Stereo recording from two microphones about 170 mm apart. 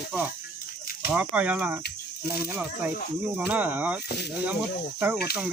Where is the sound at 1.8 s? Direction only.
70° left (ahead or behind).